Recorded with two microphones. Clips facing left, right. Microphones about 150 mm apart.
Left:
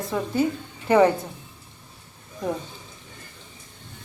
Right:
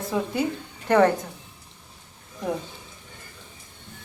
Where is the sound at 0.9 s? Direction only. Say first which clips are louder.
Left 1 dB; 10° left (ahead or behind).